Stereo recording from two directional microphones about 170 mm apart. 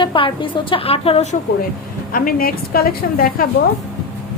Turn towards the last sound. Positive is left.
turn(degrees=60)  # may be behind; listen again after turning